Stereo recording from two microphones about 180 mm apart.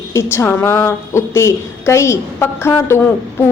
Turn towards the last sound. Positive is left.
turn(degrees=15)  # may be behind; listen again after turning